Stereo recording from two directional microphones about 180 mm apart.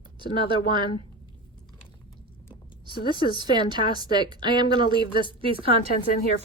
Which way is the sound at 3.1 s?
25° right (ahead or behind).